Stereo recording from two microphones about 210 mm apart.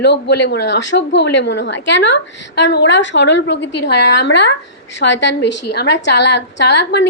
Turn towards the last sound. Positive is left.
turn(degrees=55)  # may be behind; listen again after turning